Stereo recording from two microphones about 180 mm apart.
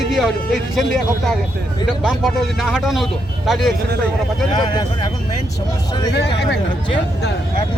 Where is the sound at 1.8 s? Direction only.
Centre (ahead or behind).